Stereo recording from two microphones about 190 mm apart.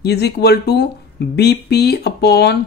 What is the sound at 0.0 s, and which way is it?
Speech, 60° left (ahead or behind).